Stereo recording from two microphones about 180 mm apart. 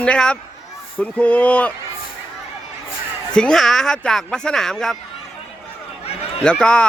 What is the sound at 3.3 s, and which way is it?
Speech, 5° left (ahead or behind).